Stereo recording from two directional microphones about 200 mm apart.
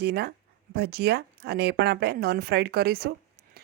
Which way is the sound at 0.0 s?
55° right (ahead or behind).